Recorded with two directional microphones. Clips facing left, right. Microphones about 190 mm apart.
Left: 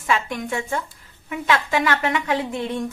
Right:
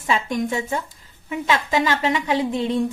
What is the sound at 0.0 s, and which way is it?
A woman's voice, 20° right (ahead or behind).